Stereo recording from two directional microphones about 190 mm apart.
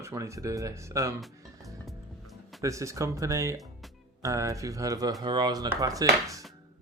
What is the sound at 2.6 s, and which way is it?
Speech, 15° right (ahead or behind).